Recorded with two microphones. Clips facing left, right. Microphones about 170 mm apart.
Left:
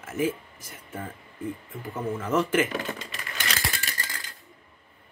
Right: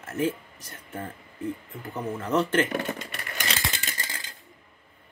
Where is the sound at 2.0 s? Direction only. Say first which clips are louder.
Even; 5° left (ahead or behind).